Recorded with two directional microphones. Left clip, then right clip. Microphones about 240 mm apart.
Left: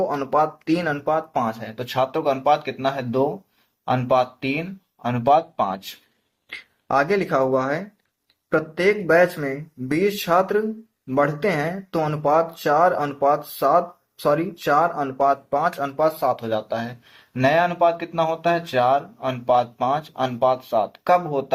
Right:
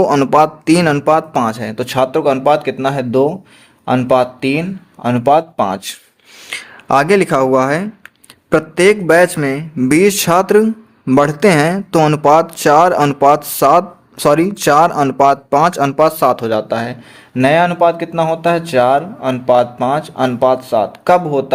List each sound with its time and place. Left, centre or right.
0.0 s speech: right